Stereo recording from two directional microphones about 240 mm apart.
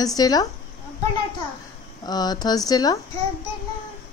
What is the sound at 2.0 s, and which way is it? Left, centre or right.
Speech, centre.